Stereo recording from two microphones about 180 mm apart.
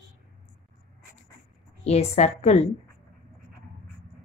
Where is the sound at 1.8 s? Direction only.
35° left (ahead or behind).